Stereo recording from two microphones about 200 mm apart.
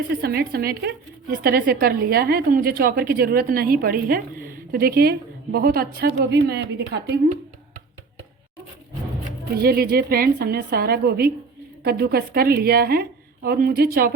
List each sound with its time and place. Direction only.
0.2 s a woman's voice: 50° right (ahead or behind)
9.6 s a woman's voice: 50° right (ahead or behind)